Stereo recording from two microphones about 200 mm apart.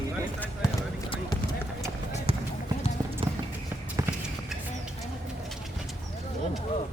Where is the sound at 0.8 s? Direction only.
20° left (ahead or behind).